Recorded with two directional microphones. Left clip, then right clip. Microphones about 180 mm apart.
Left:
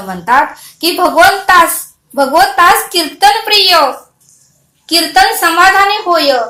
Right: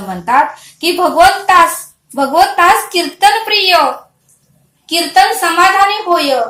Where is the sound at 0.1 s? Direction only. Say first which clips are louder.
Left 1 dB; 15° left (ahead or behind).